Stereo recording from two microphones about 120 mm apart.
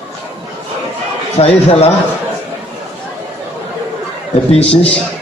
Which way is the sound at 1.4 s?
60° left (ahead or behind).